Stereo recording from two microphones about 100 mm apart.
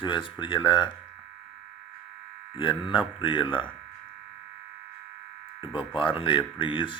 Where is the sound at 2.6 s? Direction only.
55° left (ahead or behind).